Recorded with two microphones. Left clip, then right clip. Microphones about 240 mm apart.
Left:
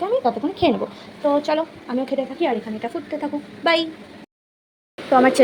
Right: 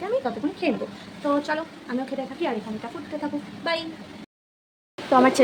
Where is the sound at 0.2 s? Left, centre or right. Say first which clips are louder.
Left 8 dB; centre.